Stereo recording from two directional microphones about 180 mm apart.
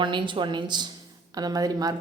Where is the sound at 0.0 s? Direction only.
25° right (ahead or behind).